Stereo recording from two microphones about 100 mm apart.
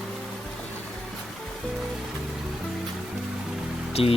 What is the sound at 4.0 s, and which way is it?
Speech, 75° left (ahead or behind).